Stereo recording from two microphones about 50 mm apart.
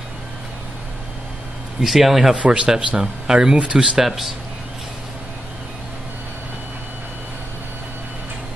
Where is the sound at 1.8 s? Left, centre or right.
Centre.